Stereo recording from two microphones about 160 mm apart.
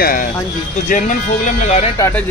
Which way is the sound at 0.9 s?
50° left (ahead or behind).